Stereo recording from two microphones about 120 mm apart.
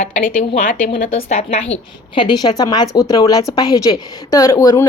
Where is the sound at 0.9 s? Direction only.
55° left (ahead or behind).